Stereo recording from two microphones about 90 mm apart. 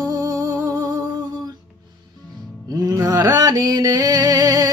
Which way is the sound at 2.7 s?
45° right (ahead or behind).